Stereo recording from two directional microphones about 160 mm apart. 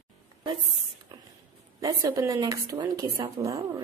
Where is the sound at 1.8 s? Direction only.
20° right (ahead or behind).